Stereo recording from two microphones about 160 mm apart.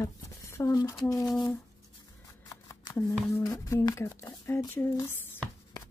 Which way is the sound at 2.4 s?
20° left (ahead or behind).